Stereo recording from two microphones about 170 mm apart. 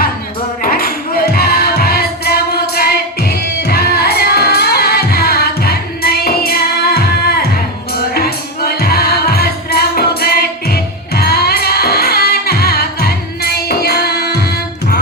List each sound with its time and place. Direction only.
0.6 s music: 60° left (ahead or behind)